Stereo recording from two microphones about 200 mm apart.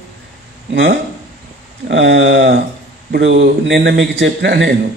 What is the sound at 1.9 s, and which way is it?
A man's voice, 65° right (ahead or behind).